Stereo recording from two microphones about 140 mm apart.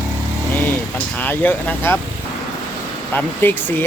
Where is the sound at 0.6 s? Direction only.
15° left (ahead or behind).